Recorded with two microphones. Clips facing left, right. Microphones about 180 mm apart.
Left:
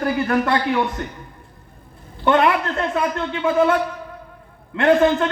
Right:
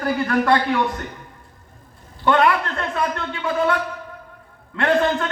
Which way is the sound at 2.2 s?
25° left (ahead or behind).